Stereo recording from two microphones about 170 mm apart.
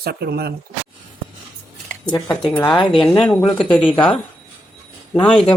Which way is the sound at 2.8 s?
30° left (ahead or behind).